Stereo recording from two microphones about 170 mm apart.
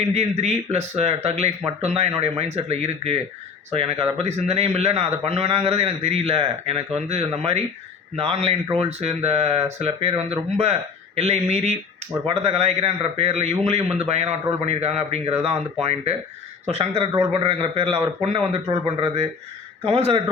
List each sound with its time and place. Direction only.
0.0 s a man's voice: 40° right (ahead or behind)